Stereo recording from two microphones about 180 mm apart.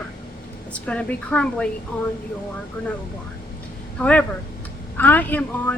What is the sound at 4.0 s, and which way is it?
A woman's voice, 10° left (ahead or behind).